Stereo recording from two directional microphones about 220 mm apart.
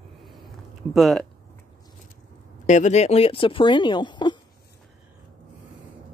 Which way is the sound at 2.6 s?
35° left (ahead or behind).